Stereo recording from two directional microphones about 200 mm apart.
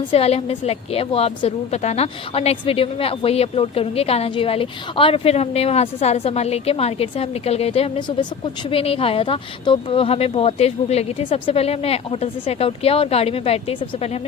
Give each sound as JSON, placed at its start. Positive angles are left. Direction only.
{"t": 0.1, "sound": "a woman's voice", "side_deg": 30}